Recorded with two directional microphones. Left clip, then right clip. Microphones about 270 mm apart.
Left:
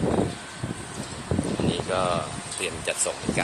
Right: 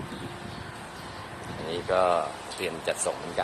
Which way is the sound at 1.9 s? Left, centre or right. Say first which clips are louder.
Right 5 dB; centre.